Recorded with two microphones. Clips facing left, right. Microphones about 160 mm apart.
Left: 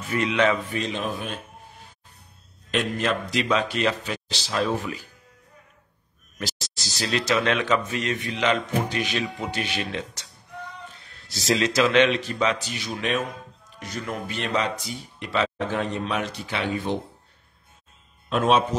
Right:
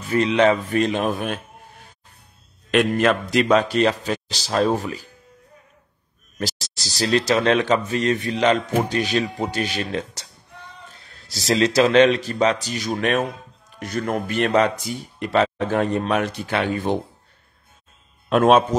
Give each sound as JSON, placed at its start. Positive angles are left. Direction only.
{"t": 0.1, "sound": "speech", "side_deg": -35}
{"t": 0.7, "sound": "a man's voice", "side_deg": -55}
{"t": 2.7, "sound": "speech", "side_deg": -60}
{"t": 7.0, "sound": "speech", "side_deg": -40}
{"t": 18.3, "sound": "speech", "side_deg": -55}